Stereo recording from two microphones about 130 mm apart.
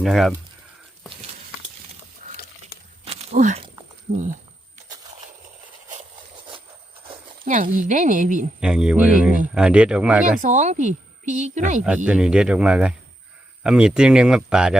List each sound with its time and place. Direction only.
0.0 s speech: centre (ahead or behind)
3.0 s walk: 55° right (ahead or behind)
4.1 s speech: 75° right (ahead or behind)
7.4 s speech: 85° right
8.6 s speech: 5° right (ahead or behind)
10.4 s speech: 65° right (ahead or behind)
12.0 s speech: 5° right (ahead or behind)